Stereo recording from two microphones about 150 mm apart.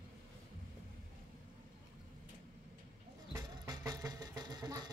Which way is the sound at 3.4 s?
25° right (ahead or behind).